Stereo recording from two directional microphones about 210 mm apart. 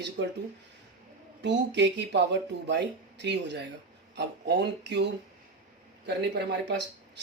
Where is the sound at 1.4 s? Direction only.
55° right (ahead or behind).